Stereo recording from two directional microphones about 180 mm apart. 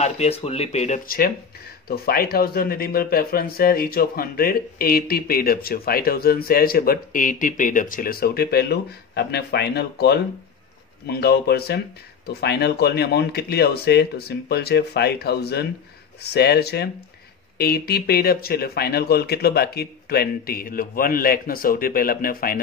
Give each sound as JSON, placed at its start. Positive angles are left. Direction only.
{"t": 0.0, "sound": "speech", "side_deg": 35}